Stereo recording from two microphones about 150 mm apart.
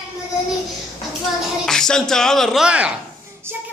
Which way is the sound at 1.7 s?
5° left (ahead or behind).